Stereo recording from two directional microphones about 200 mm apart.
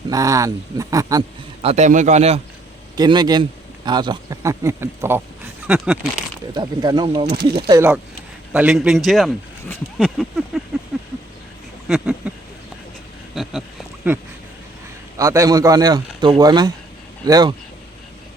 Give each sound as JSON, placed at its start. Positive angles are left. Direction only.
{"t": 0.1, "sound": "speech", "side_deg": -15}
{"t": 1.6, "sound": "a man's voice", "side_deg": -35}
{"t": 2.9, "sound": "speech", "side_deg": -20}
{"t": 6.5, "sound": "speech", "side_deg": -20}
{"t": 8.5, "sound": "speech", "side_deg": -5}
{"t": 10.9, "sound": "a sound", "side_deg": 0}
{"t": 13.3, "sound": "a sound", "side_deg": 0}
{"t": 15.2, "sound": "speech", "side_deg": -15}